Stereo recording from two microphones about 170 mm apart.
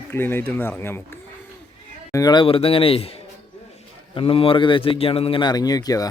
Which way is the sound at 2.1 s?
25° left (ahead or behind).